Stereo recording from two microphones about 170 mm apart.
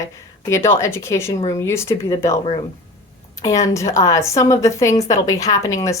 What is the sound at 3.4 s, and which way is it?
Speech, 20° left (ahead or behind).